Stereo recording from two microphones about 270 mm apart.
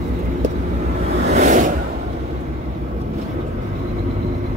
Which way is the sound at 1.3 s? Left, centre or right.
Right.